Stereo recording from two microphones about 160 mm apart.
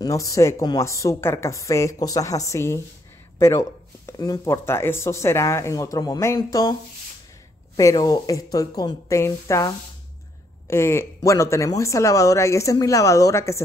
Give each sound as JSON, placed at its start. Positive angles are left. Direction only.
{"t": 0.0, "sound": "speech", "side_deg": 20}